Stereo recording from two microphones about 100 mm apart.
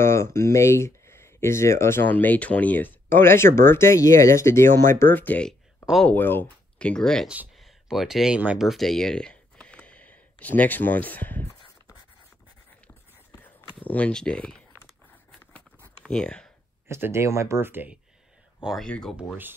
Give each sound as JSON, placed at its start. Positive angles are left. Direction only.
{"t": 0.0, "sound": "speech", "side_deg": 25}
{"t": 6.9, "sound": "speech", "side_deg": 5}
{"t": 8.5, "sound": "a sound", "side_deg": 0}
{"t": 13.7, "sound": "speech", "side_deg": 15}
{"t": 16.0, "sound": "speech", "side_deg": 10}
{"t": 16.8, "sound": "speech", "side_deg": -25}
{"t": 18.6, "sound": "speech", "side_deg": -5}
{"t": 18.9, "sound": "speech", "side_deg": 10}